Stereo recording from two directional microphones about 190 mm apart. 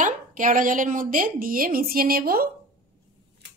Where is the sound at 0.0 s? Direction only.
45° right (ahead or behind).